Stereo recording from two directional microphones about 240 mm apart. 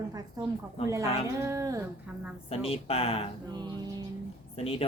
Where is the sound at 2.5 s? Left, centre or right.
Left.